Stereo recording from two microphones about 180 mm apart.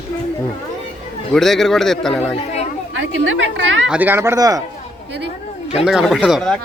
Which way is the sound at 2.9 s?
90° right.